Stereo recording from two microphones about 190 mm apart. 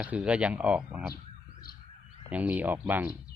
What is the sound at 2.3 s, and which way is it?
Speech, 10° right (ahead or behind).